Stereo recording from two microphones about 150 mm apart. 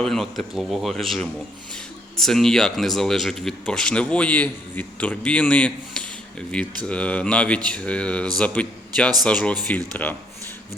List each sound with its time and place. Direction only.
0.0 s speech: 5° left (ahead or behind)